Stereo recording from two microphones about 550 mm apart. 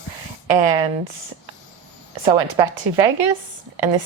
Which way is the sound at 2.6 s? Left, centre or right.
Right.